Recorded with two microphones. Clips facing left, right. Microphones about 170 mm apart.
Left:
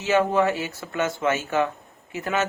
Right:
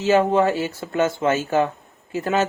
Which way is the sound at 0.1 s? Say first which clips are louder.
Right 3 dB; 30° right (ahead or behind).